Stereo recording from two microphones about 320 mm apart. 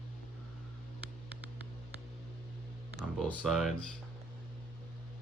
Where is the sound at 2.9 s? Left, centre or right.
Centre.